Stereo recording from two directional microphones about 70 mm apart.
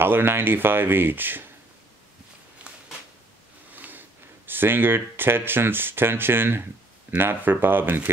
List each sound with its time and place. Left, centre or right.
0.0 s speech: right
2.6 s a sound: centre
4.5 s speech: right